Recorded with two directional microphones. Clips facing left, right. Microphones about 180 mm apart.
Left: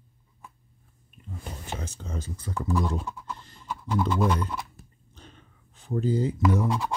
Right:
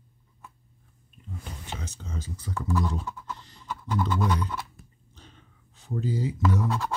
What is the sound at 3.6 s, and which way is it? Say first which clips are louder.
Speech: left 2 dB; 10° left (ahead or behind).